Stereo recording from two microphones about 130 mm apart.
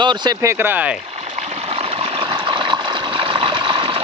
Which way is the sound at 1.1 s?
60° right (ahead or behind).